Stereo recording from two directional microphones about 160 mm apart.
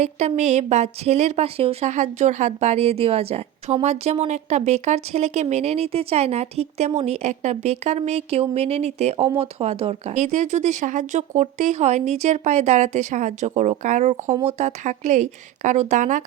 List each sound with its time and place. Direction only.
0.0 s a woman's voice: 45° right (ahead or behind)